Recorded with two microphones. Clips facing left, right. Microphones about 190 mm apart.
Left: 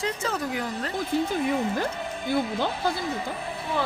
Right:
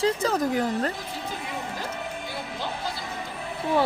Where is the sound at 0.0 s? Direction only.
35° right (ahead or behind).